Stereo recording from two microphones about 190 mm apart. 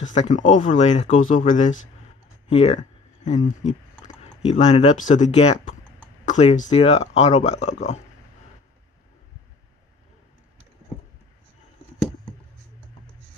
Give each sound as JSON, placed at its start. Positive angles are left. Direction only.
{"t": 0.0, "sound": "speech", "side_deg": 40}